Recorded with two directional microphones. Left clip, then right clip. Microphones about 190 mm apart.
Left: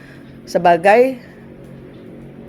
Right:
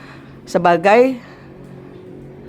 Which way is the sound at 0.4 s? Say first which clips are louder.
Left 1 dB; 20° right (ahead or behind).